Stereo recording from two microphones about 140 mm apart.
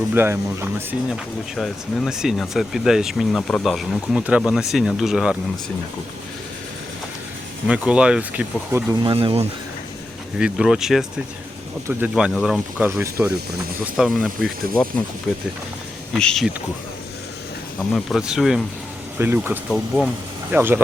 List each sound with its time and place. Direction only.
0.1 s speech: 15° right (ahead or behind)
1.1 s speech: centre (ahead or behind)
7.7 s speech: 5° right (ahead or behind)
9.0 s speech: 40° right (ahead or behind)
10.3 s speech: 5° right (ahead or behind)
13.0 s speech: 15° right (ahead or behind); by 16.5 s 5° left (ahead or behind)
17.9 s speech: centre (ahead or behind)
19.2 s speech: 15° right (ahead or behind)